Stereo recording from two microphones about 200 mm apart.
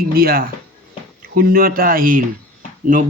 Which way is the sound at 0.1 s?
50° right (ahead or behind).